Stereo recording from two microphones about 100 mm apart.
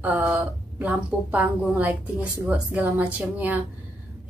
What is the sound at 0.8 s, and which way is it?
A woman's voice, 15° right (ahead or behind).